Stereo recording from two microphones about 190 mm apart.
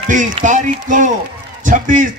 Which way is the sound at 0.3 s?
35° right (ahead or behind).